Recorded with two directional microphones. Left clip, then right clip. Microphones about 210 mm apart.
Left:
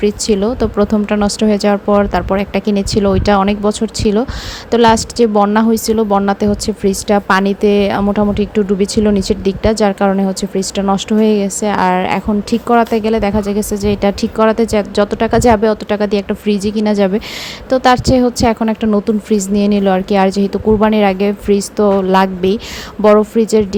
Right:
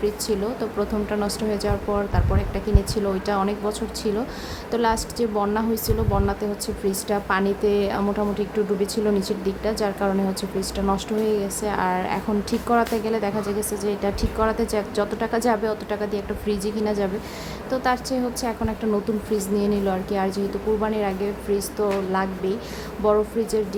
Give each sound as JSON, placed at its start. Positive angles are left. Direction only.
{"t": 0.0, "sound": "a woman's voice", "side_deg": 35}